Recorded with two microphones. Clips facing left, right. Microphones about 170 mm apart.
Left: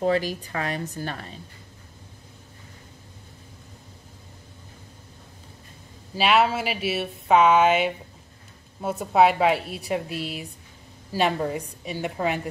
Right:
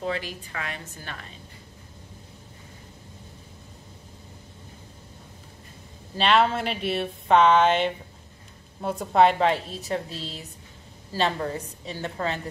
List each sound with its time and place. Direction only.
0.0 s a woman's voice: 40° left (ahead or behind)
6.1 s speech: 5° left (ahead or behind)